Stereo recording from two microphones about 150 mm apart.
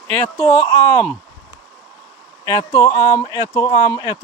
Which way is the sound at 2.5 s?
25° left (ahead or behind).